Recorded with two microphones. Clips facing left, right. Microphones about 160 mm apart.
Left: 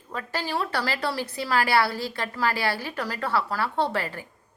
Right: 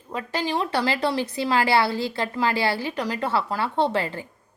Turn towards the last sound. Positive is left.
turn(degrees=-25)  # may be behind; listen again after turning